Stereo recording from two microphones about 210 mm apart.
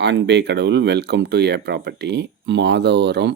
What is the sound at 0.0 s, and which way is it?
Speech, 55° right (ahead or behind).